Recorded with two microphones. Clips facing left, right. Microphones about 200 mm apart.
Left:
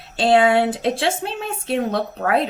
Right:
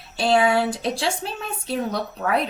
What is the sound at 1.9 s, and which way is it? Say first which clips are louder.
Speech: left 4 dB; 55° left (ahead or behind).